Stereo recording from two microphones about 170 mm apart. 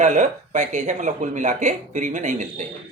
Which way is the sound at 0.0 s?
45° right (ahead or behind).